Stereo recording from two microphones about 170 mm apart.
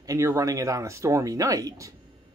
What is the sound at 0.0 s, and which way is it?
Speech, 20° right (ahead or behind).